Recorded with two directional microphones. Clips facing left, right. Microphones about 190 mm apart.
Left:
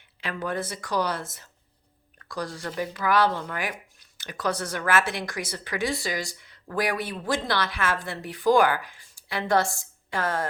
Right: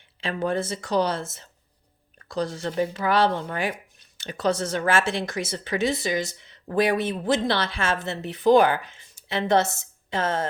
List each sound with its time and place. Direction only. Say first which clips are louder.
0.2 s speech: right 4 dB; 25° right (ahead or behind)